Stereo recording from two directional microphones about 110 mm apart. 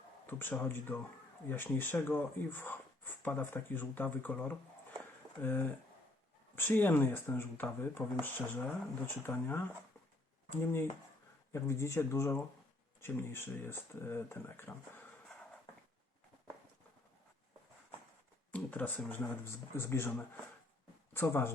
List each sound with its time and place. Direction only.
0.3 s speech: 20° left (ahead or behind)
18.5 s speech: 15° left (ahead or behind)
21.1 s speech: 20° left (ahead or behind)